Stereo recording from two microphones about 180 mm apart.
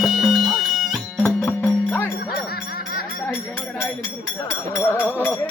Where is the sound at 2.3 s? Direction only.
60° left (ahead or behind).